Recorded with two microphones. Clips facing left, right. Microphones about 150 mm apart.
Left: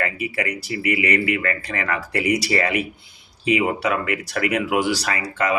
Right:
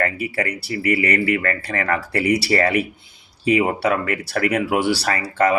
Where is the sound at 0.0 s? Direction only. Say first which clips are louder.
Right 2 dB; 35° right (ahead or behind).